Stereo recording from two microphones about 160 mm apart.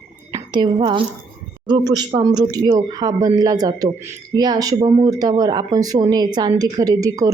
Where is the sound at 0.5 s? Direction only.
30° right (ahead or behind).